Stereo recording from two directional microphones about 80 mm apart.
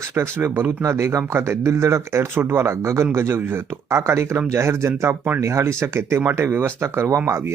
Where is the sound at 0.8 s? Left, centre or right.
Right.